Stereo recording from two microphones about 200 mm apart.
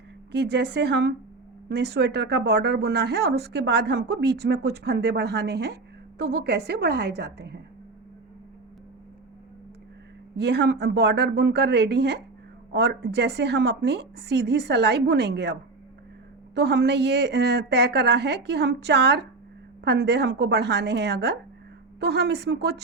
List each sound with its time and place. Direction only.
0.3 s speech: 60° right (ahead or behind)
10.3 s speech: 60° right (ahead or behind)
16.6 s speech: 55° right (ahead or behind)